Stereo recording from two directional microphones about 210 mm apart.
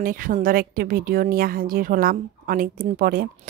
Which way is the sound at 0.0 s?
40° right (ahead or behind).